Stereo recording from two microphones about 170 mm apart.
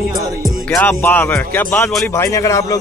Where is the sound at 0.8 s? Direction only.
10° left (ahead or behind).